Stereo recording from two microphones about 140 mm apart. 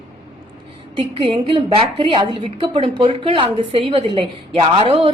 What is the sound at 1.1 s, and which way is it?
A woman's voice, 40° right (ahead or behind).